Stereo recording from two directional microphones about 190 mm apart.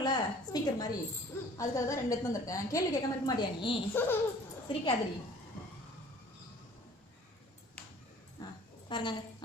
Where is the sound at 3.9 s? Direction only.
10° left (ahead or behind).